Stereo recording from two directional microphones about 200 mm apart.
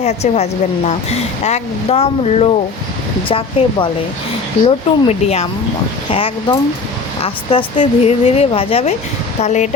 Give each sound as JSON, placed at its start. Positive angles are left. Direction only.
{"t": 0.0, "sound": "a woman's voice", "side_deg": 35}